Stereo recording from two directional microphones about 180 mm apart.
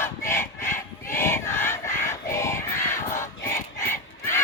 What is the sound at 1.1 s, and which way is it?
Crowd, 15° left (ahead or behind).